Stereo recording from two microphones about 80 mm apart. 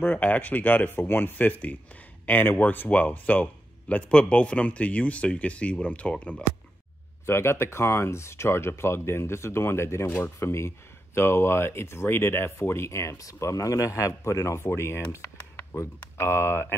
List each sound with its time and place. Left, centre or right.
0.0 s speech: centre
7.2 s speech: left